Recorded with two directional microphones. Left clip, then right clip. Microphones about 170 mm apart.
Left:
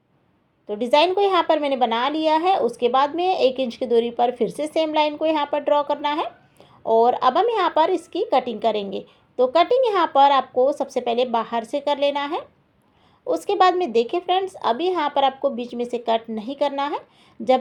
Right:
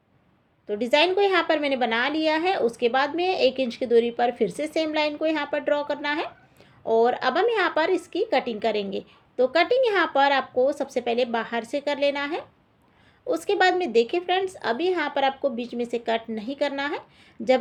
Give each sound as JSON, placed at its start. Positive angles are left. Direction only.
{"t": 0.7, "sound": "speech", "side_deg": 30}